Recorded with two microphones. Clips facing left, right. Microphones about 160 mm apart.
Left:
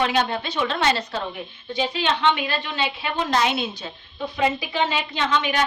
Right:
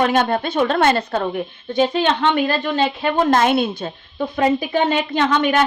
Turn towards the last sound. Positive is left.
turn(degrees=-55)  # may be behind; listen again after turning